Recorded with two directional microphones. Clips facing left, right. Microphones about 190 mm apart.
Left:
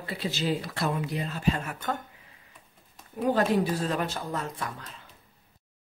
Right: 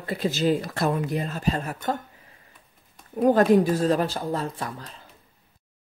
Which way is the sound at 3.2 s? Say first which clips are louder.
Right 7 dB; 45° right (ahead or behind).